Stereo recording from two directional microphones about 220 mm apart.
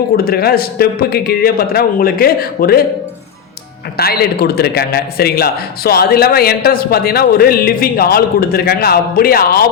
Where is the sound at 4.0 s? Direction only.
45° left (ahead or behind).